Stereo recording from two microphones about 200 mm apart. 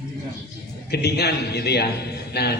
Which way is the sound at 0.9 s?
55° left (ahead or behind).